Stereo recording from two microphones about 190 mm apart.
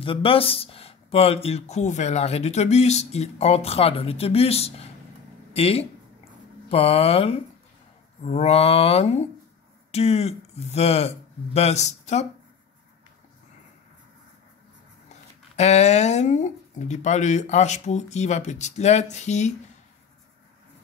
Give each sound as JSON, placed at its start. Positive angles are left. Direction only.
{"t": 0.0, "sound": "speech", "side_deg": 30}
{"t": 15.0, "sound": "speech", "side_deg": 35}